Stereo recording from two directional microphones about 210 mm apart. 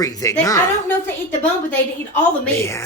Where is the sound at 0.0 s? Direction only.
15° left (ahead or behind).